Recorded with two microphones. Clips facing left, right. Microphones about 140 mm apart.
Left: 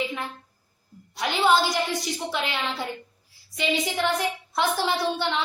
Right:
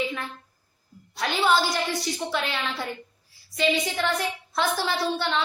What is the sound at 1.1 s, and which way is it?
A woman's voice, 20° left (ahead or behind).